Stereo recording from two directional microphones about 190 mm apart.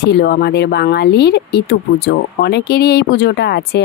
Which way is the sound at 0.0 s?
60° left (ahead or behind).